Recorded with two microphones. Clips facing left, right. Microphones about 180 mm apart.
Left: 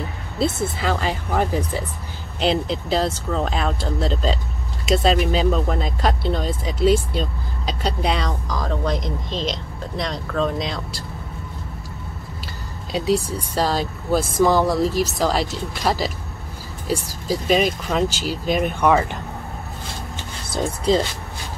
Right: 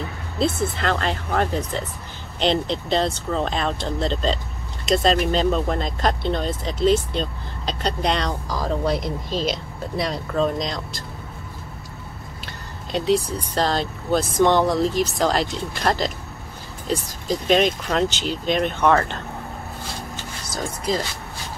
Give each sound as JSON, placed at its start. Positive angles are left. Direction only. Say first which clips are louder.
{"t": 0.4, "sound": "speech", "louder": "even", "side_deg": 5}
{"t": 12.9, "sound": "speech", "louder": "even", "side_deg": 5}
{"t": 20.5, "sound": "speech", "louder": "left 6 dB", "side_deg": 30}